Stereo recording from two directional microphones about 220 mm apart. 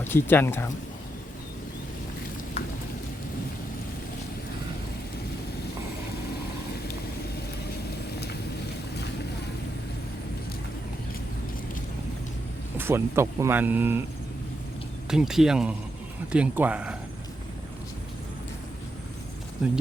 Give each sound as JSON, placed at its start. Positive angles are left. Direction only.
{"t": 0.0, "sound": "speech", "side_deg": 10}
{"t": 2.6, "sound": "a sound", "side_deg": 25}
{"t": 12.7, "sound": "speech", "side_deg": -10}
{"t": 15.1, "sound": "speech", "side_deg": 0}
{"t": 19.6, "sound": "speech", "side_deg": -5}